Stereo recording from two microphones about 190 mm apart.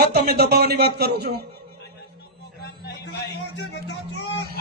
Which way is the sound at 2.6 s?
60° left (ahead or behind).